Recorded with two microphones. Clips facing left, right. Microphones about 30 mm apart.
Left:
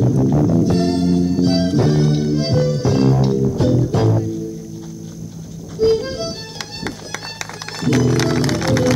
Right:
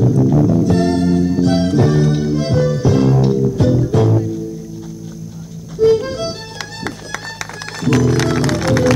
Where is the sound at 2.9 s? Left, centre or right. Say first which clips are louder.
Right 1 dB; left.